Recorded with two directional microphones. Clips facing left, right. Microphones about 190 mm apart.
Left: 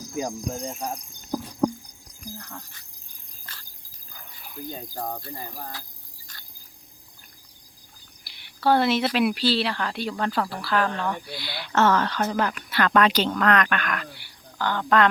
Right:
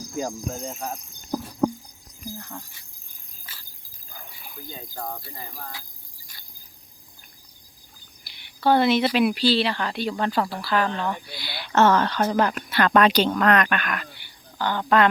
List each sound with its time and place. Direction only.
0.3 s speech: centre (ahead or behind)
2.2 s speech: 5° right (ahead or behind)
3.4 s cricket: 5° right (ahead or behind)
8.4 s speech: centre (ahead or behind)
11.5 s speech: 20° right (ahead or behind)
12.7 s speech: 20° right (ahead or behind)